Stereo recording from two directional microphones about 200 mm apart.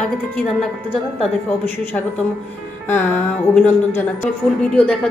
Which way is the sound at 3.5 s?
10° left (ahead or behind).